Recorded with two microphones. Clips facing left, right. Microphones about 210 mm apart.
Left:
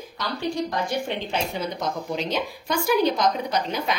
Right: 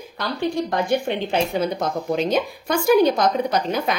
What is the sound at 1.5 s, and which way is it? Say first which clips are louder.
A woman's voice: right 5 dB; 55° right (ahead or behind).